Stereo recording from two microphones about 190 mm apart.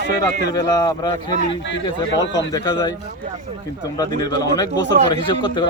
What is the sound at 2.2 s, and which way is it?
Speech, 70° left (ahead or behind).